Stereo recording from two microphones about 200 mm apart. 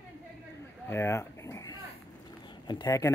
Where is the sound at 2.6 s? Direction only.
20° left (ahead or behind).